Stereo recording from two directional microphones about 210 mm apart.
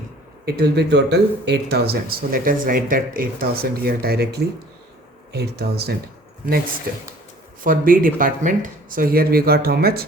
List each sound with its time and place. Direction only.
0.4 s speech: 50° right (ahead or behind)